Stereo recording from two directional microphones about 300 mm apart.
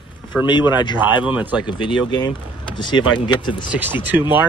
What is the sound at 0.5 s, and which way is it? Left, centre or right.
Speech, centre.